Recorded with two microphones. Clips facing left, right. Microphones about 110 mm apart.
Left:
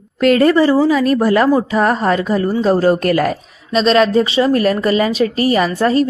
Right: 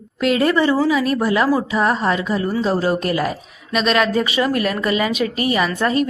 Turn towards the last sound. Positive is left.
turn(degrees=35)  # may be behind; listen again after turning